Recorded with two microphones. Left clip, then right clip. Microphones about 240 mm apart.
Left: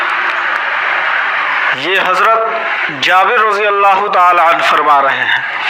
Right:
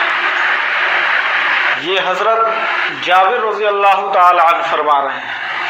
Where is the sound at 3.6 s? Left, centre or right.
Left.